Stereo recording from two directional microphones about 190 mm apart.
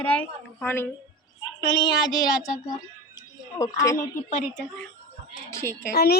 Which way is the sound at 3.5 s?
15° left (ahead or behind).